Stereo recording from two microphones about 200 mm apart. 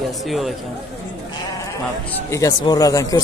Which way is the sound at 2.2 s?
15° left (ahead or behind).